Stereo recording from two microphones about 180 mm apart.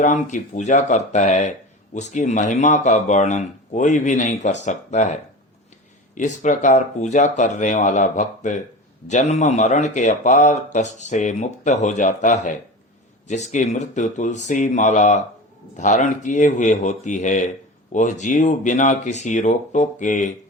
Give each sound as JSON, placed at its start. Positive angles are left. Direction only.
{"t": 0.0, "sound": "speech", "side_deg": 45}
{"t": 6.1, "sound": "speech", "side_deg": 45}